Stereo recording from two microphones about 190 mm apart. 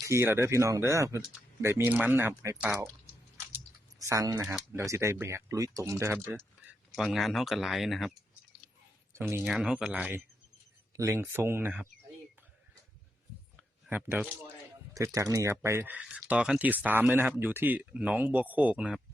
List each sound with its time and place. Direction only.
0.1 s speech: 15° right (ahead or behind)
3.3 s typing: 10° right (ahead or behind)
4.7 s speech: 15° right (ahead or behind)
6.9 s speech: centre (ahead or behind)
9.3 s speech: 5° right (ahead or behind)
13.6 s a sound: 5° right (ahead or behind)
14.9 s speech: 15° right (ahead or behind)